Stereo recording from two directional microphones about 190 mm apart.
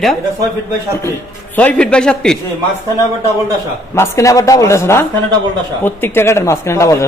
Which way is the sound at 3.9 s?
15° left (ahead or behind).